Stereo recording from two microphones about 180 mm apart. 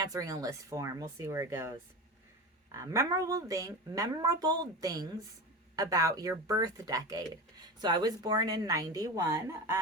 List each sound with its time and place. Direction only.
0.0 s a woman's voice: 20° right (ahead or behind)
2.7 s a woman's voice: 15° right (ahead or behind)